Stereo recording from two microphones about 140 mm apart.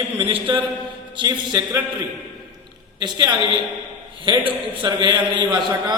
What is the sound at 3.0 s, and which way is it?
A man's voice, 30° right (ahead or behind).